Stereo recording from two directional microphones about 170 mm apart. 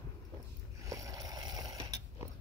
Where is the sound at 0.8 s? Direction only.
20° right (ahead or behind).